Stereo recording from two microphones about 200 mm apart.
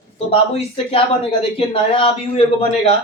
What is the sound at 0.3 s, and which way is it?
Speech, 30° left (ahead or behind).